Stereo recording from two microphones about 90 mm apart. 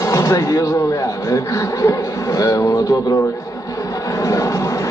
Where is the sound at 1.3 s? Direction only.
40° left (ahead or behind).